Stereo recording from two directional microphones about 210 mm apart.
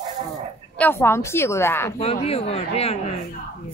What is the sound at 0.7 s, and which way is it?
Speech, 10° left (ahead or behind).